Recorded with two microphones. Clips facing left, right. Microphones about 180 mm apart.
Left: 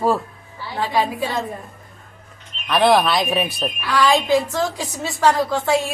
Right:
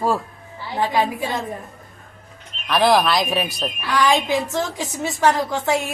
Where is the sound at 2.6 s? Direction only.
Centre (ahead or behind).